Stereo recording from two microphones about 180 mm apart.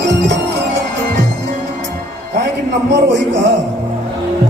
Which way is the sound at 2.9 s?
75° right (ahead or behind).